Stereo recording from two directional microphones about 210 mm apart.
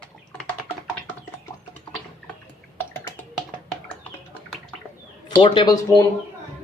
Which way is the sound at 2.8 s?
10° left (ahead or behind).